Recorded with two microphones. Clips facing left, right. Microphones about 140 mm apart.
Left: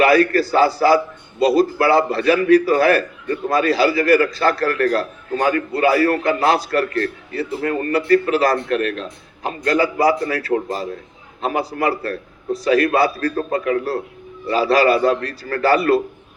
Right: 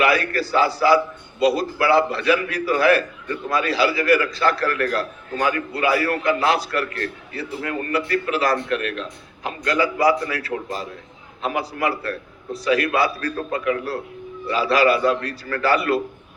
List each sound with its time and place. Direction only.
0.0 s a man's voice: 40° left (ahead or behind)